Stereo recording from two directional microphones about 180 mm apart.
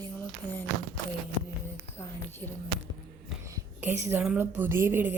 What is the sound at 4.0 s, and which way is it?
A woman's voice, 10° right (ahead or behind).